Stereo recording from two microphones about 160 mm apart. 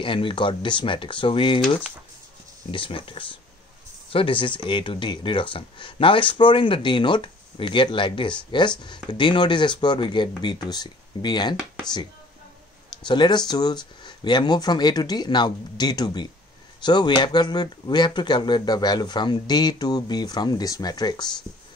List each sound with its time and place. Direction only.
0.0 s speech: 35° left (ahead or behind)
2.7 s speech: 35° left (ahead or behind)
13.0 s speech: 30° left (ahead or behind)